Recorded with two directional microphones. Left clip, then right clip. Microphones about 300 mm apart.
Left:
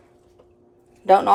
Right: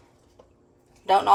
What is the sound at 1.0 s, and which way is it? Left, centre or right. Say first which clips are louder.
Speech: left 5 dB; left.